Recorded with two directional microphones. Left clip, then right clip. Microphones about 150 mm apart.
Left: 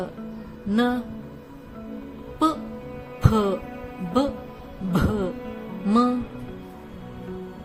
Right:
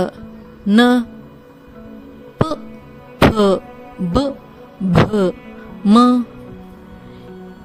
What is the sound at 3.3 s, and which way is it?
Speech, 90° right.